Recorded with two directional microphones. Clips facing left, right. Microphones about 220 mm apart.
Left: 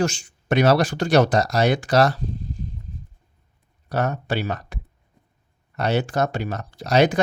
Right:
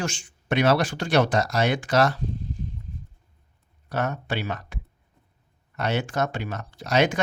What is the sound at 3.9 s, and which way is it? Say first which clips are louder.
Speech: left 4 dB; 35° left (ahead or behind).